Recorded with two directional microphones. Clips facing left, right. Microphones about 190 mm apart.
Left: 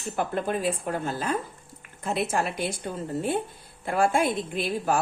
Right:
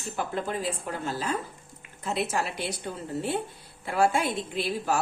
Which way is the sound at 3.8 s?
50° left (ahead or behind).